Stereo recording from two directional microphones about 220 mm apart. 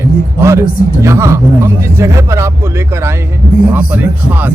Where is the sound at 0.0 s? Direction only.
10° right (ahead or behind).